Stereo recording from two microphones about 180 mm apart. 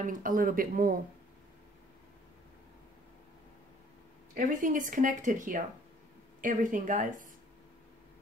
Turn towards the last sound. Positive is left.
turn(degrees=-45)  # may be behind; listen again after turning